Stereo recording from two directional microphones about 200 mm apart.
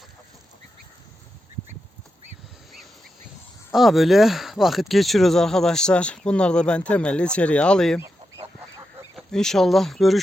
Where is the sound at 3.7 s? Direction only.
Centre (ahead or behind).